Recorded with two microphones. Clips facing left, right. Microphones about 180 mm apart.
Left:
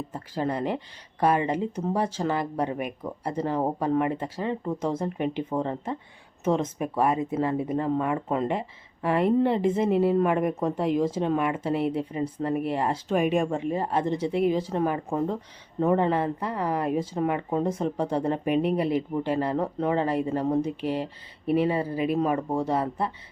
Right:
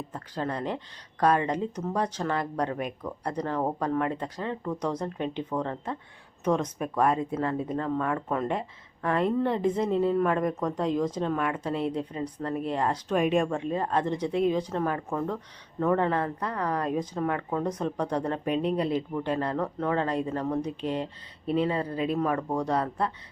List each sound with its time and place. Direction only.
0.1 s speech: 10° left (ahead or behind)
17.7 s speech: 25° left (ahead or behind)
18.1 s speech: 10° left (ahead or behind)